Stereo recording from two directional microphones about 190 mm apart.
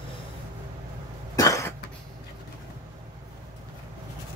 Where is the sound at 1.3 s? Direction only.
15° left (ahead or behind).